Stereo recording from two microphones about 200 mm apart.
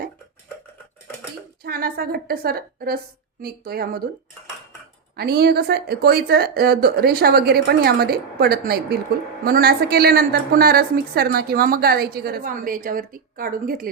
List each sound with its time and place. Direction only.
1.6 s a woman's voice: 50° right (ahead or behind)
5.1 s a woman's voice: 50° right (ahead or behind)